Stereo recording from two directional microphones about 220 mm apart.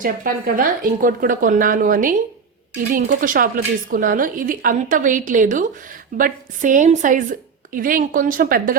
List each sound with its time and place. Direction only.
0.0 s a woman's voice: 40° right (ahead or behind)